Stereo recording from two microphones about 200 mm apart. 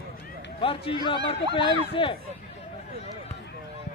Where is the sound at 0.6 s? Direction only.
25° left (ahead or behind).